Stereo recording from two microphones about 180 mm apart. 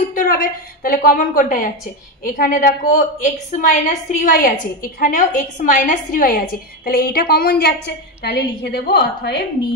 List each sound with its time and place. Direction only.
0.1 s a woman's voice: 50° left (ahead or behind)
8.3 s a woman's voice: 70° left (ahead or behind)